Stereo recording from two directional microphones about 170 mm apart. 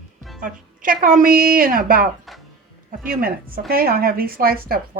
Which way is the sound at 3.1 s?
60° right (ahead or behind).